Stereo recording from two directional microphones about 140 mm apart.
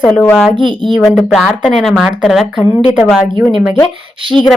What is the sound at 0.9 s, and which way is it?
A woman's voice, centre (ahead or behind).